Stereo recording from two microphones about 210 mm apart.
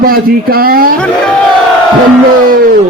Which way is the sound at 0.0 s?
45° right (ahead or behind).